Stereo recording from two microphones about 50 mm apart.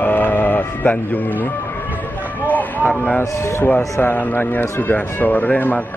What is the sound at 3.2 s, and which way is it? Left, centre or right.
Speech, left.